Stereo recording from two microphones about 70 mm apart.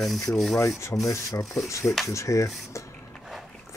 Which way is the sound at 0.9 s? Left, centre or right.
Left.